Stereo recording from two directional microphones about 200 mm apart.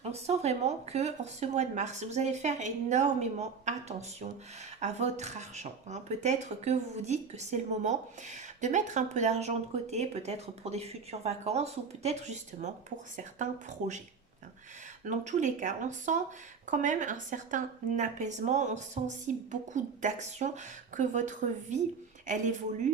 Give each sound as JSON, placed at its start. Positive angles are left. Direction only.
{"t": 0.0, "sound": "speech", "side_deg": -30}
{"t": 15.0, "sound": "speech", "side_deg": -40}